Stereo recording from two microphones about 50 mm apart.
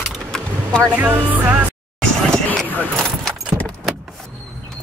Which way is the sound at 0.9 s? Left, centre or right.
Right.